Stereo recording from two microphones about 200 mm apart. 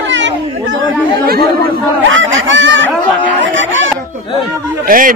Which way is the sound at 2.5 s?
65° right (ahead or behind).